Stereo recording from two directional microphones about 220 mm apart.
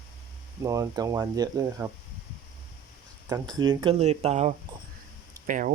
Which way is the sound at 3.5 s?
20° right (ahead or behind).